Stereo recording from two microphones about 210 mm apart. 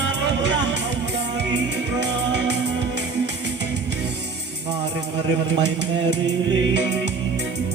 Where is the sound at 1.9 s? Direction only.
55° right (ahead or behind).